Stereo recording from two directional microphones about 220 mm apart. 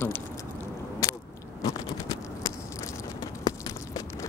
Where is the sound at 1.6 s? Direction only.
15° left (ahead or behind).